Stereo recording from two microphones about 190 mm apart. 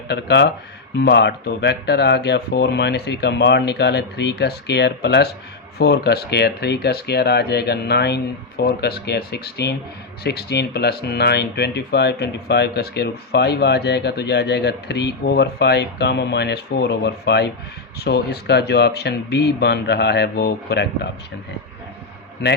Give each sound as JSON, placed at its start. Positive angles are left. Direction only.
{"t": 0.1, "sound": "speech", "side_deg": 60}
{"t": 22.4, "sound": "speech", "side_deg": 60}